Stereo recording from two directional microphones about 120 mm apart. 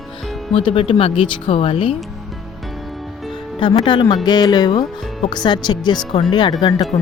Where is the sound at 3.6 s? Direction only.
40° left (ahead or behind).